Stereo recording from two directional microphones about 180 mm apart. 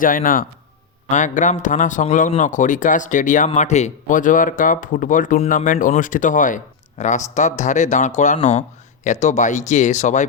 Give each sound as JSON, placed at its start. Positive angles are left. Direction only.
{"t": 0.0, "sound": "speech", "side_deg": 50}